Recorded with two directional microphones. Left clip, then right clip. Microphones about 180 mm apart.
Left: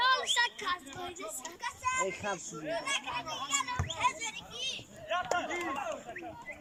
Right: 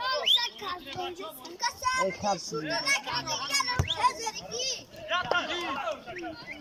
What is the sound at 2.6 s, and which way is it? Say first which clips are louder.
Speech: right 4 dB; 5° left (ahead or behind).